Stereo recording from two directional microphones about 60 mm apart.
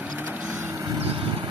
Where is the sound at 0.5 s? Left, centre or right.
Right.